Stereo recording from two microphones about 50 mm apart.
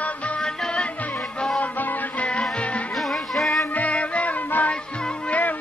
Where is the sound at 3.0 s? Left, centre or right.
Centre.